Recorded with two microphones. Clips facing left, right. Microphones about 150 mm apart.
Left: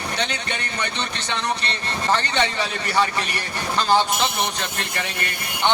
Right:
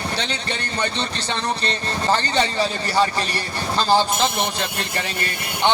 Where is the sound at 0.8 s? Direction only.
35° right (ahead or behind).